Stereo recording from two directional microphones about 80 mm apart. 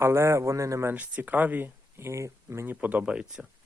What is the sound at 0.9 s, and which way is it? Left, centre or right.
Speech, right.